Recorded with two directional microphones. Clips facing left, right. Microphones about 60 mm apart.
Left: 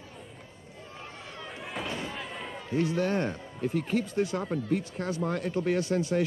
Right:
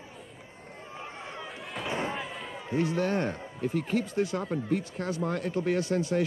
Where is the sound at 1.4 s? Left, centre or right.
Centre.